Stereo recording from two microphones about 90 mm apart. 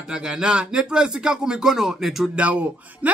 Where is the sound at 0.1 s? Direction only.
10° right (ahead or behind).